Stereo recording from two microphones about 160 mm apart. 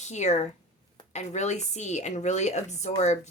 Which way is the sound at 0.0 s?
45° left (ahead or behind).